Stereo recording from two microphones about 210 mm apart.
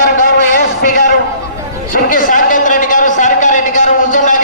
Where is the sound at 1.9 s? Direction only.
40° left (ahead or behind).